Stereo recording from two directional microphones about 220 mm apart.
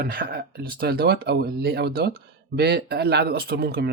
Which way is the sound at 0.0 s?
40° right (ahead or behind).